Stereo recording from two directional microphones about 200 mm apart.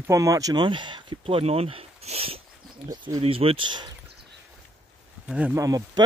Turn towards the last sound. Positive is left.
turn(degrees=-15)  # may be behind; listen again after turning